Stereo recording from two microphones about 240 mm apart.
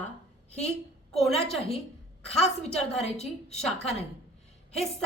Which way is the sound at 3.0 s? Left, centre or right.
Left.